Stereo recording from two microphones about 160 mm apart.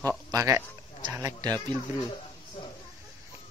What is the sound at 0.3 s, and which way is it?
Speech, 20° right (ahead or behind).